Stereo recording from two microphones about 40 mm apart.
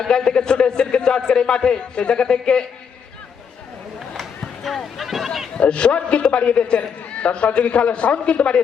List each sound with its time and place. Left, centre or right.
0.0 s a man's voice: centre
4.6 s sheep: centre
5.5 s a man's voice: left